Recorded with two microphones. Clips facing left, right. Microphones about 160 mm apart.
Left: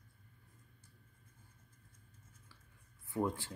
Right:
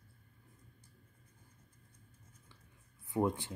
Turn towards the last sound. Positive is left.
turn(degrees=-20)  # may be behind; listen again after turning